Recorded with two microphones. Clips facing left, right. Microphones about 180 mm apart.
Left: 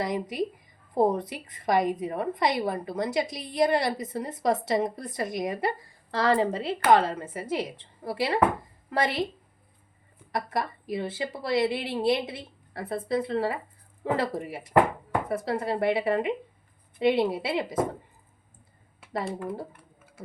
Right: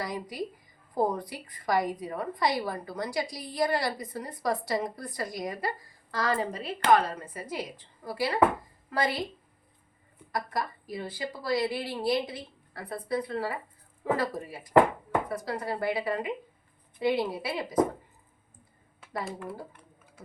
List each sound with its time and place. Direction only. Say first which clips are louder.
0.0 s a woman's voice: left 5 dB; 20° left (ahead or behind)
10.3 s a woman's voice: left 3 dB; 25° left (ahead or behind)